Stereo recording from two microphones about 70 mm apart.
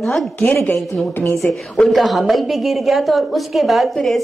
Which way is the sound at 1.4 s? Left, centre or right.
Centre.